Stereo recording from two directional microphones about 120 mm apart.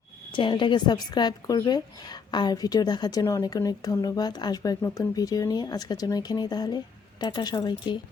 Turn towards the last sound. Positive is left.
turn(degrees=35)  # may be behind; listen again after turning